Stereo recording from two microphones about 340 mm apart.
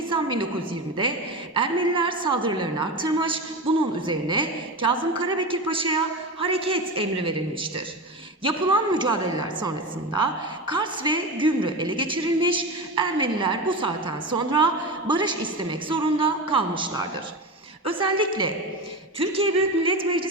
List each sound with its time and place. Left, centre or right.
0.1 s a woman's voice: centre